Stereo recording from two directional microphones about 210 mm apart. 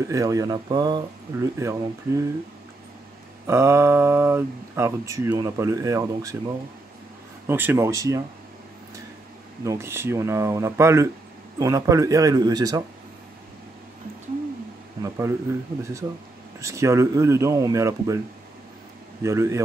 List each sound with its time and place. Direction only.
0.0 s speech: 15° right (ahead or behind)
3.4 s speech: 10° right (ahead or behind)
7.4 s speech: 10° right (ahead or behind)
9.7 s speech: 10° right (ahead or behind)
15.0 s speech: 15° right (ahead or behind)
19.2 s speech: 15° right (ahead or behind)